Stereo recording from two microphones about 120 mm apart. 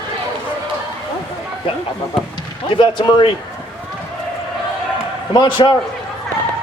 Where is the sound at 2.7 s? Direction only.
45° left (ahead or behind).